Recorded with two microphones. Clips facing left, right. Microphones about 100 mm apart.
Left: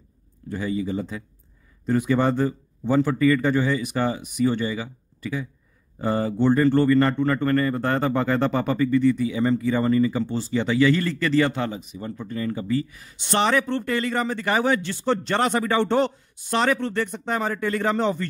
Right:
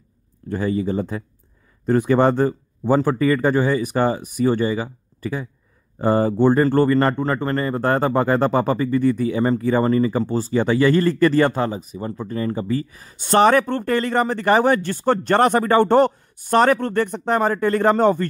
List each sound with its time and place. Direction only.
0.5 s a man's voice: 45° right (ahead or behind)